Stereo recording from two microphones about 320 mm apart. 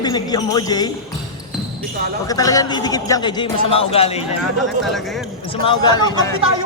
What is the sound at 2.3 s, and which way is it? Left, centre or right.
A man's voice, centre.